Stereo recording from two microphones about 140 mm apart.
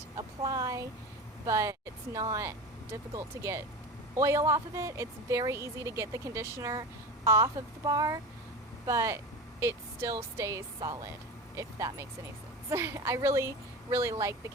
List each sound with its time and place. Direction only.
0.2 s a woman's voice: 25° right (ahead or behind)